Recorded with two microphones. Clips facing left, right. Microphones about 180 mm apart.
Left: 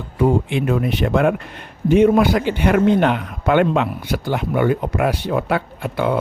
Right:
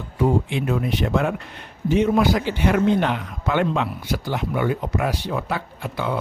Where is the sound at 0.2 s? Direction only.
60° left (ahead or behind).